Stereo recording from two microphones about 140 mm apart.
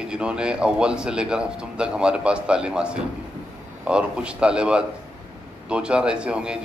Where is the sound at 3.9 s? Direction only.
5° right (ahead or behind).